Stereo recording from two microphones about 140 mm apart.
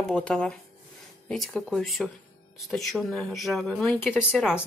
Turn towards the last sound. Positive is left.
turn(degrees=-5)  # may be behind; listen again after turning